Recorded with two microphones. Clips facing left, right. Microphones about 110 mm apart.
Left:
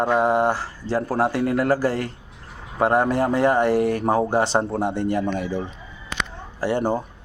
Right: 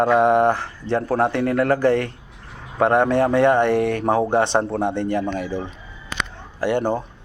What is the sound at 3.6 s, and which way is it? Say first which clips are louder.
Speech: right 1 dB; 30° left (ahead or behind).